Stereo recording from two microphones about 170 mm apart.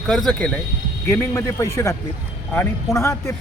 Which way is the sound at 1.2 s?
15° left (ahead or behind).